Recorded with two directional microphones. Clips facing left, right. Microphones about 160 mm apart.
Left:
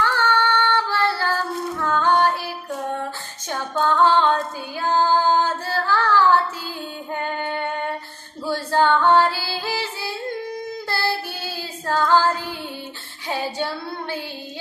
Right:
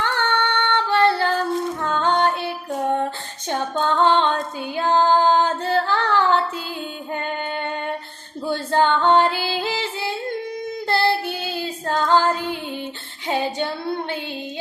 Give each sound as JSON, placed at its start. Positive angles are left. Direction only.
{"t": 0.0, "sound": "female singing", "side_deg": -20}
{"t": 3.5, "sound": "female singing", "side_deg": -20}
{"t": 4.8, "sound": "child singing", "side_deg": -20}
{"t": 7.1, "sound": "music", "side_deg": -20}
{"t": 8.4, "sound": "female singing", "side_deg": -20}
{"t": 10.8, "sound": "child singing", "side_deg": -20}